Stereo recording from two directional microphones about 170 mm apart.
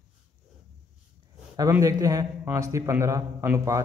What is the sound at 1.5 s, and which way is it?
A man's voice, 20° right (ahead or behind).